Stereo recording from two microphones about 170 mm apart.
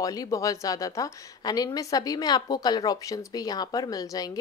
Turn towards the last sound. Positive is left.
turn(degrees=20)  # may be behind; listen again after turning